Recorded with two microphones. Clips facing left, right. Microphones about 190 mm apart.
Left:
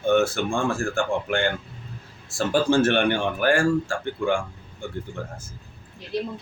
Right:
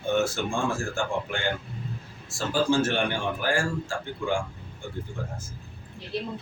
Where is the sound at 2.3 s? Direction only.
60° left (ahead or behind).